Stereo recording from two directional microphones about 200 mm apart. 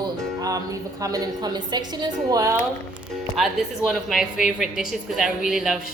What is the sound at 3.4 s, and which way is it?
A woman's voice, centre (ahead or behind).